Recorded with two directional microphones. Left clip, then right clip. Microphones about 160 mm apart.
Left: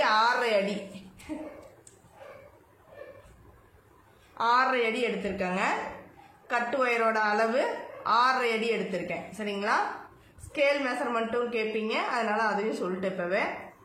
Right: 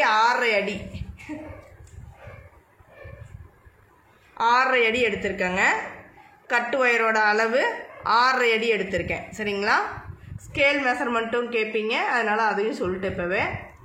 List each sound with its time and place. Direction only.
0.0 s a sound: 50° right (ahead or behind)
4.4 s a woman's voice: 45° right (ahead or behind)
10.5 s a woman's voice: 70° right (ahead or behind)